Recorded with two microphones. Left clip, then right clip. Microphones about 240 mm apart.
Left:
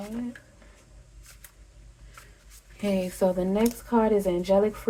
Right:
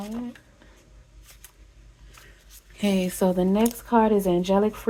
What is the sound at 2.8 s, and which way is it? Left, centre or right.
Speech, right.